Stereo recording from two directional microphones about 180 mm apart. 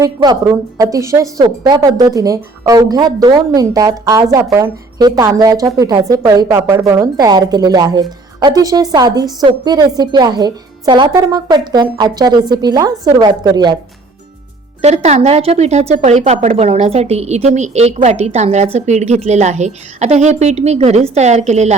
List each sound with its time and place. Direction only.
0.0 s a woman's voice: 20° right (ahead or behind)
14.8 s a woman's voice: 40° right (ahead or behind)